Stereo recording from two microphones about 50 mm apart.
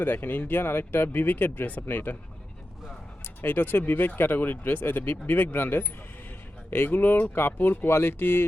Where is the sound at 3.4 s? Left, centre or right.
Left.